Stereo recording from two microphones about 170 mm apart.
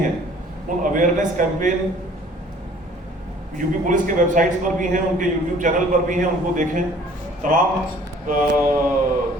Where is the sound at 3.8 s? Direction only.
50° right (ahead or behind).